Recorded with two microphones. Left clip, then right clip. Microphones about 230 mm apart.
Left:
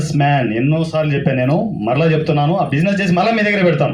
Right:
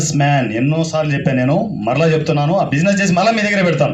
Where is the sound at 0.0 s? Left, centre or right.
Right.